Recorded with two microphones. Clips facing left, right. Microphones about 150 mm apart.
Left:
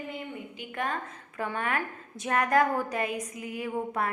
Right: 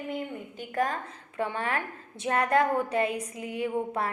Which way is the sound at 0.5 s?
40° right (ahead or behind).